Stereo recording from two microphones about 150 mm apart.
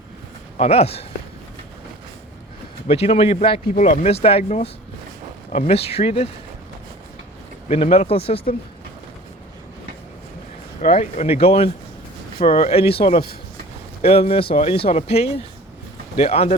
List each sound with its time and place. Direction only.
0.6 s speech: 45° left (ahead or behind)
2.8 s speech: 40° left (ahead or behind)
3.8 s speech: 45° left (ahead or behind)
7.7 s speech: 40° left (ahead or behind)
10.9 s speech: 40° left (ahead or behind)